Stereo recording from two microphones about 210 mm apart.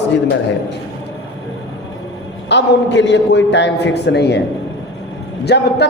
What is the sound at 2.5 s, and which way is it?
A man's voice, 55° left (ahead or behind).